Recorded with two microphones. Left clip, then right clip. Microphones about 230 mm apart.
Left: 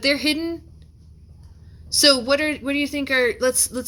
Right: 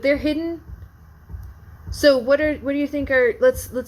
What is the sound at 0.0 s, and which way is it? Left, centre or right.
Speech, left.